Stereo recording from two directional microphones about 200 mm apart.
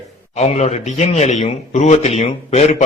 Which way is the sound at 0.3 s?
35° left (ahead or behind).